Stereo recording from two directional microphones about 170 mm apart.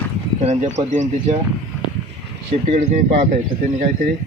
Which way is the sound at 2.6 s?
50° right (ahead or behind).